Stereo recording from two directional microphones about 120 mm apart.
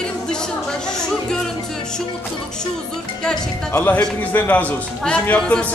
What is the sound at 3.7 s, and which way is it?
A man's voice, 15° left (ahead or behind).